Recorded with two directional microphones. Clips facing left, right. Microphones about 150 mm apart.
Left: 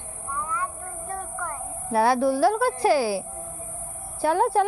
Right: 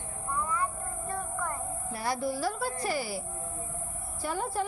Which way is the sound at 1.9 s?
70° left (ahead or behind).